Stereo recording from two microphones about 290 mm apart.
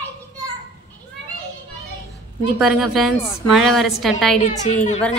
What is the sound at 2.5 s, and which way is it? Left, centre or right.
A woman's voice, centre.